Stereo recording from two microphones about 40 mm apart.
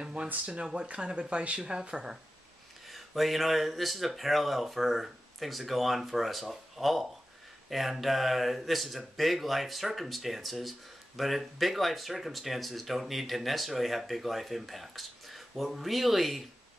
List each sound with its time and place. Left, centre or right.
0.0 s a sound: right
0.8 s speech: right
2.9 s speech: centre